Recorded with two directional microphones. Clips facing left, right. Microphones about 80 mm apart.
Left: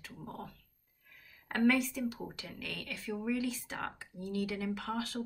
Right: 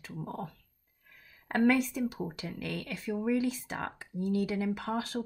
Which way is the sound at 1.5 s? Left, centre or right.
Right.